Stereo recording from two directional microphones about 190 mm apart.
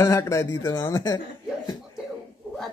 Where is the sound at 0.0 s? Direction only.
15° left (ahead or behind).